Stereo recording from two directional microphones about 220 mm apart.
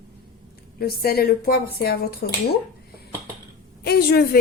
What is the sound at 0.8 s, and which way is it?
Speech, 45° left (ahead or behind).